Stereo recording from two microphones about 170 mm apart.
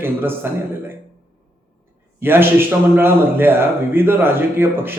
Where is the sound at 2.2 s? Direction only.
15° right (ahead or behind).